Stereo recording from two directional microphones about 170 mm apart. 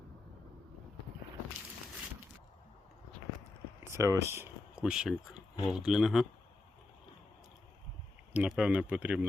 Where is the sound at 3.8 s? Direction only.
15° right (ahead or behind).